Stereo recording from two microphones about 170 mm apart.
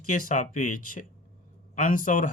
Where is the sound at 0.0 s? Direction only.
50° left (ahead or behind).